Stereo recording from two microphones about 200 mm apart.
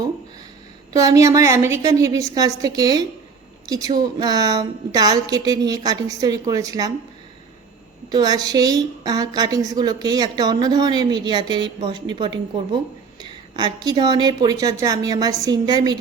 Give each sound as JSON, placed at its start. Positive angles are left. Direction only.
{"t": 0.9, "sound": "a woman's voice", "side_deg": -15}
{"t": 8.1, "sound": "a woman's voice", "side_deg": -20}